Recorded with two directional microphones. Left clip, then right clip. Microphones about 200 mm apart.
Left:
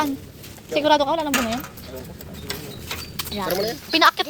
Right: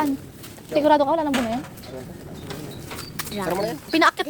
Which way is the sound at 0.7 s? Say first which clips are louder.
Right 1 dB; 10° right (ahead or behind).